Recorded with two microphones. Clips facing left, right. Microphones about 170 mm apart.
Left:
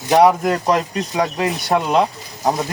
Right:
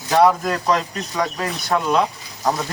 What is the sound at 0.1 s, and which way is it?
Speech, 20° left (ahead or behind).